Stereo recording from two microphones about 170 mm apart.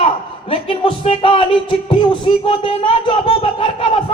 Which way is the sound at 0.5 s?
30° left (ahead or behind).